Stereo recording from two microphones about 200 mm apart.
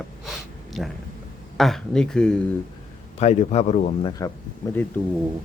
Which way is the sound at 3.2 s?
35° left (ahead or behind).